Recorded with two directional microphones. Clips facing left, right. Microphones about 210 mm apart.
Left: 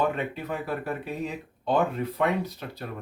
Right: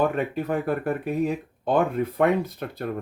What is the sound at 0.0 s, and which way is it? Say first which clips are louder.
Speech: right 4 dB; 50° right (ahead or behind).